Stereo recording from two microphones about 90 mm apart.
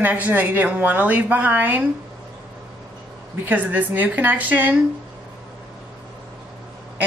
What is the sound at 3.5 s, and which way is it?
Speech, 20° right (ahead or behind).